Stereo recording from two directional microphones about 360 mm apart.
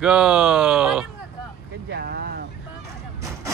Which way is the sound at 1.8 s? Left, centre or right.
Right.